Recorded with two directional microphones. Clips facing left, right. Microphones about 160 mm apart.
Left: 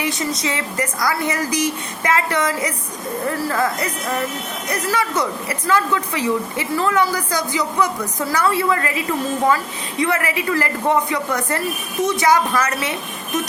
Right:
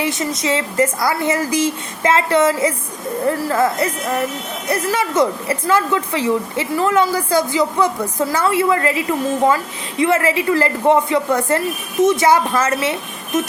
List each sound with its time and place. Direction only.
0.0 s a woman's voice: 20° right (ahead or behind)
10.0 s a woman's voice: 25° right (ahead or behind)